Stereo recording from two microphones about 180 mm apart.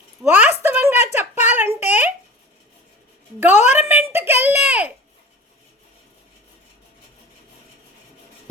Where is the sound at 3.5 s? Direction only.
40° left (ahead or behind).